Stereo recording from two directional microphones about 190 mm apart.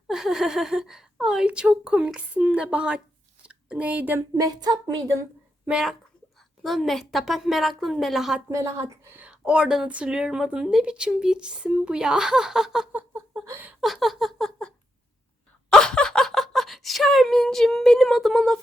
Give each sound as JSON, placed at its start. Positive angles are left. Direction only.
{"t": 0.1, "sound": "a woman's voice", "side_deg": 0}
{"t": 3.4, "sound": "a sound", "side_deg": -5}
{"t": 4.4, "sound": "a woman's voice", "side_deg": -20}
{"t": 5.6, "sound": "a woman's voice", "side_deg": -5}
{"t": 8.4, "sound": "a woman's voice", "side_deg": -15}
{"t": 13.8, "sound": "a sound", "side_deg": 0}
{"t": 15.7, "sound": "speech", "side_deg": 5}